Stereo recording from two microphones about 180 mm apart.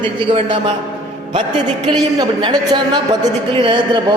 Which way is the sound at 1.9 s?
25° right (ahead or behind).